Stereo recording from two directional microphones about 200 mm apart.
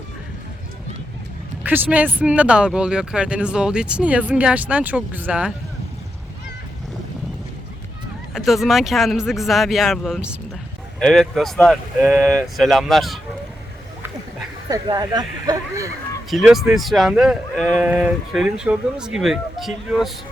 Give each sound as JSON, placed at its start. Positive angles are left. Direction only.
{"t": 1.6, "sound": "speech", "side_deg": -10}
{"t": 8.3, "sound": "speech", "side_deg": 0}
{"t": 14.7, "sound": "speech", "side_deg": -20}
{"t": 16.3, "sound": "speech", "side_deg": 0}
{"t": 17.8, "sound": "speech", "side_deg": -10}